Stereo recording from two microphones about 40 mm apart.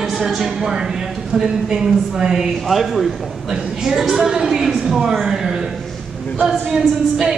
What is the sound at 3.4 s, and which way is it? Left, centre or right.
A woman's voice, centre.